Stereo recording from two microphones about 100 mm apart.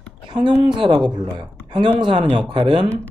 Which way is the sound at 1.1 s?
50° right (ahead or behind).